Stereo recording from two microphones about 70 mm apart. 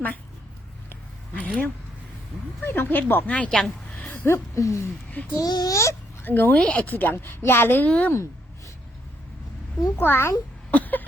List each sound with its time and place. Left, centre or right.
1.4 s a sound: centre
2.6 s speech: left
3.2 s speech: centre
3.5 s a sound: centre
4.0 s a sound: left
4.3 s speech: left
5.4 s a child's voice: left
5.7 s speech: left
6.2 s a woman's voice: left
6.6 s a woman's voice: centre; by 7.9 s left
7.9 s a woman's voice: centre
10.0 s speech: left
10.7 s a sound: left